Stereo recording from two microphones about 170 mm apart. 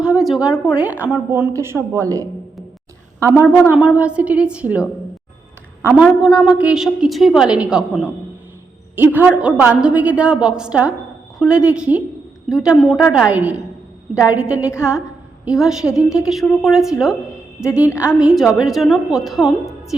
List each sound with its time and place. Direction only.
0.0 s a woman's voice: 5° right (ahead or behind)
5.8 s a woman's voice: 5° right (ahead or behind)
18.0 s a woman's voice: 5° right (ahead or behind)